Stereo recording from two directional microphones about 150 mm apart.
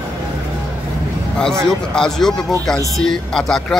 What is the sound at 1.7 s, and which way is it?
Speech, 5° left (ahead or behind).